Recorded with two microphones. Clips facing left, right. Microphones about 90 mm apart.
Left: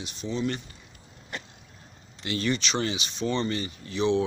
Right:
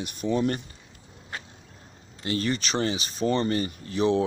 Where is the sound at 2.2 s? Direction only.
40° right (ahead or behind).